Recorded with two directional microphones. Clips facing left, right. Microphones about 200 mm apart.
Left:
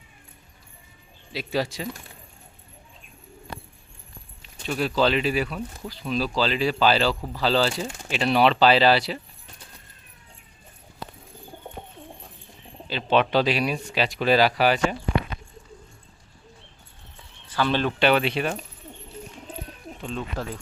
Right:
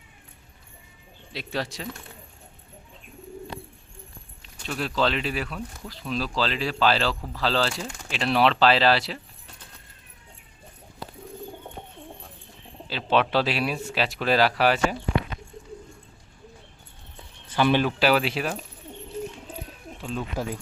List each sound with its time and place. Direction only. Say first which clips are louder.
1.3 s speech: left 4 dB; centre (ahead or behind)
4.6 s speech: left 3 dB; 5° left (ahead or behind)
7.7 s speech: left 4 dB; 25° left (ahead or behind)
8.1 s speech: left 2 dB; centre (ahead or behind)
12.9 s speech: left 2 dB; centre (ahead or behind)
17.5 s speech: right 2 dB; 15° right (ahead or behind)
18.0 s speech: left 1 dB; 5° right (ahead or behind)
20.0 s speech: right 1 dB; 5° right (ahead or behind)